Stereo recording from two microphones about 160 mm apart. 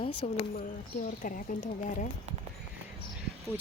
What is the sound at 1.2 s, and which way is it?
Speech, 55° left (ahead or behind).